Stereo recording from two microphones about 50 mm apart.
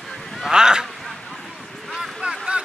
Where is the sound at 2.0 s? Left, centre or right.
Centre.